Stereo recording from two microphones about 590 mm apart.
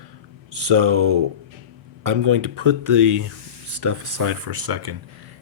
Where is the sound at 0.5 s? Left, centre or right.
Right.